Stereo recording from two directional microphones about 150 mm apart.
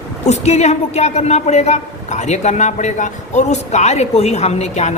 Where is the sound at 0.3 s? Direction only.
45° left (ahead or behind).